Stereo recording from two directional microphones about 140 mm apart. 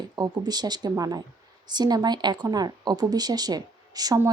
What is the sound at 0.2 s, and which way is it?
A woman's voice, 30° right (ahead or behind).